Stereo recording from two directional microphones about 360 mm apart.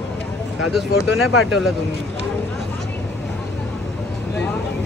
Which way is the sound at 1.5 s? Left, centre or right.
Centre.